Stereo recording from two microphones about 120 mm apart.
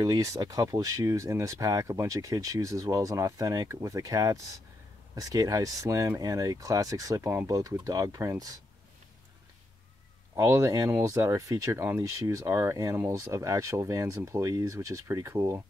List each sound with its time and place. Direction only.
0.0 s speech: 30° right (ahead or behind)
10.3 s speech: 25° right (ahead or behind)